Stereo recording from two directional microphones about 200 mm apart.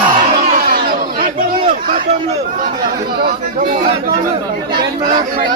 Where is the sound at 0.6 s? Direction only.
45° right (ahead or behind).